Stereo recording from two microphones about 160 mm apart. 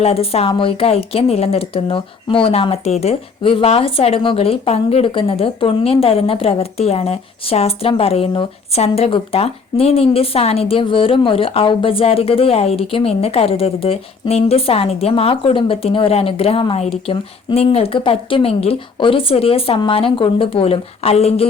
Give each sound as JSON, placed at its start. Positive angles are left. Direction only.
{"t": 0.0, "sound": "speech", "side_deg": 40}